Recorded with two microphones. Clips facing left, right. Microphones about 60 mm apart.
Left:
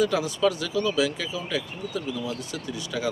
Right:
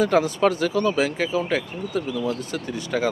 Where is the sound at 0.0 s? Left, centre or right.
Right.